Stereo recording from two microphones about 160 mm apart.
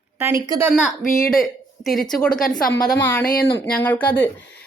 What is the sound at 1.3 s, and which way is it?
Speech, centre (ahead or behind).